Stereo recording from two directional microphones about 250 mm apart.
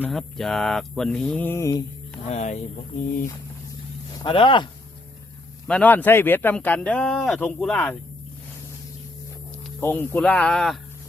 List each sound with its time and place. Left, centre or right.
0.0 s mantra: centre
2.3 s speech: left
4.2 s speech: centre
5.6 s speech: centre
9.8 s mantra: centre